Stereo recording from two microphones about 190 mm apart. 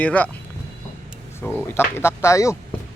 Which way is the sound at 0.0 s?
10° left (ahead or behind).